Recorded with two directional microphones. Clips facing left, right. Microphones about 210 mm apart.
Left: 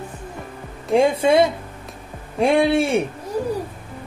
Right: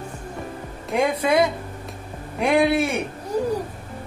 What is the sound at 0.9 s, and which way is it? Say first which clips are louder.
A woman's voice: left 4 dB; 30° left (ahead or behind).